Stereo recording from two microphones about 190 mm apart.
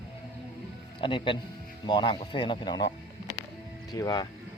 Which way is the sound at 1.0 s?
25° left (ahead or behind).